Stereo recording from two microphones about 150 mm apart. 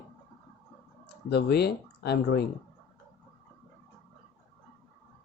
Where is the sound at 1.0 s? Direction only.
90° left.